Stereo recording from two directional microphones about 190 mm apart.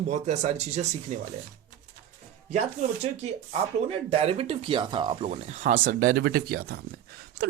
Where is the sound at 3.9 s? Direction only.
30° right (ahead or behind).